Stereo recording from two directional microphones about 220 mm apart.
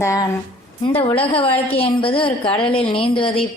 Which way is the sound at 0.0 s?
15° left (ahead or behind).